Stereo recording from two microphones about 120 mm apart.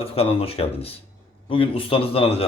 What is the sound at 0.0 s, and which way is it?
A man's voice, 55° left (ahead or behind).